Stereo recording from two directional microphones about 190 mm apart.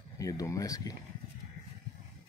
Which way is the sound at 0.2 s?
20° left (ahead or behind).